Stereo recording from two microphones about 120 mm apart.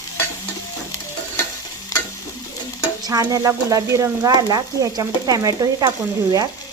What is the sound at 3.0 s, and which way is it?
Speech, 30° right (ahead or behind).